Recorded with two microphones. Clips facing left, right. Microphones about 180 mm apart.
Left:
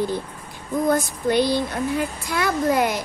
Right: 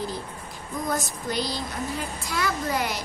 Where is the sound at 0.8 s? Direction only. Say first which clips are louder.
Left 8 dB; 55° left (ahead or behind).